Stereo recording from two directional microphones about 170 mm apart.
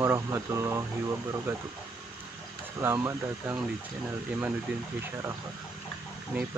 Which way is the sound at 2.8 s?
15° right (ahead or behind).